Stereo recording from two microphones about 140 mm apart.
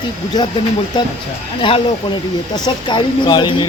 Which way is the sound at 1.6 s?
40° left (ahead or behind).